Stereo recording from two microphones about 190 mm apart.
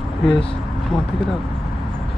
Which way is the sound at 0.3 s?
30° left (ahead or behind).